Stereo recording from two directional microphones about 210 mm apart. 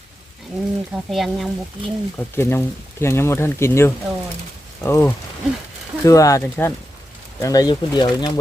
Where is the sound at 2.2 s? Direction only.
10° left (ahead or behind).